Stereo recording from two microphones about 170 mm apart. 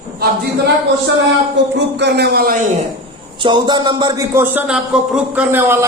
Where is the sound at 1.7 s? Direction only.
85° right; by 2.6 s 65° right (ahead or behind).